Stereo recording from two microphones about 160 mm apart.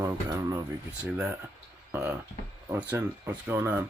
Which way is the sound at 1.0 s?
5° right (ahead or behind).